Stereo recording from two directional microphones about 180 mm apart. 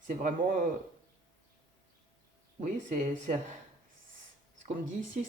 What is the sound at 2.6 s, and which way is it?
Speech, 45° right (ahead or behind).